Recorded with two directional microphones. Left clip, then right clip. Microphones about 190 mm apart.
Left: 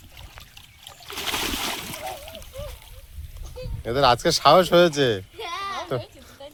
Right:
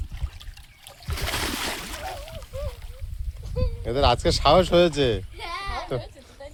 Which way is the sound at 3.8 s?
Centre (ahead or behind).